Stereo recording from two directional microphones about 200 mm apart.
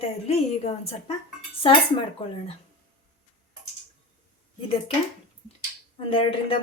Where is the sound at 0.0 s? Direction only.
30° left (ahead or behind).